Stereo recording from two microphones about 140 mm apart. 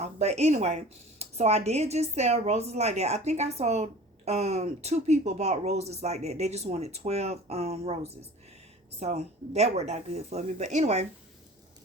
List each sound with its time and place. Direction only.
0.0 s speech: 50° right (ahead or behind)